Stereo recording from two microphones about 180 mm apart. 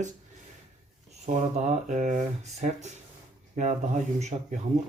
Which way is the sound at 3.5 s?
40° right (ahead or behind).